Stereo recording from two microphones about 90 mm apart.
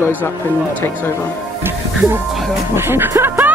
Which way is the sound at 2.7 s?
25° right (ahead or behind).